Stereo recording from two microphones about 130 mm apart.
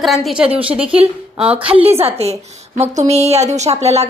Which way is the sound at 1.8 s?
50° right (ahead or behind).